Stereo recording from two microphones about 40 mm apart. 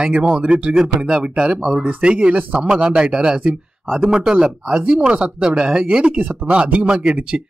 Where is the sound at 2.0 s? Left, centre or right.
Right.